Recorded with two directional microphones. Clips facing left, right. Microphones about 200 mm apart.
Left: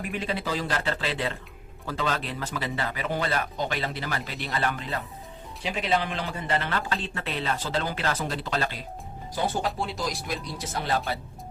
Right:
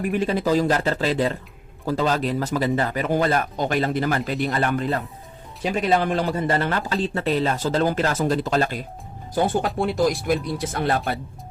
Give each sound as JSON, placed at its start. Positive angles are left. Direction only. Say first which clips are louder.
{"t": 0.0, "sound": "a man's voice", "louder": "right 9 dB", "side_deg": -45}